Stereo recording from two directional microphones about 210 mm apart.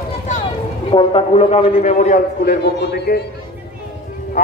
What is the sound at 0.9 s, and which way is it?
A man's voice, 25° left (ahead or behind).